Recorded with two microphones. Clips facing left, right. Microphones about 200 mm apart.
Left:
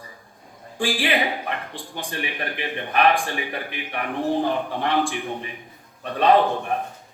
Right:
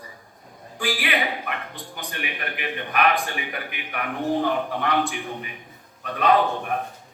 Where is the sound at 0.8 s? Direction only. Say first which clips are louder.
Left 3 dB; 30° left (ahead or behind).